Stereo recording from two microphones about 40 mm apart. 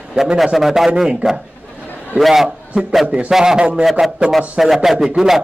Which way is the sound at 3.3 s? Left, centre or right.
Centre.